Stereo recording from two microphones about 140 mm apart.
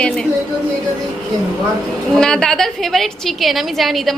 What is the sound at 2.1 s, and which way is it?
A woman's voice, 5° left (ahead or behind).